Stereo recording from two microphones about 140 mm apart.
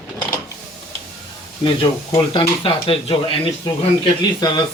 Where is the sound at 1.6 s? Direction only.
35° left (ahead or behind).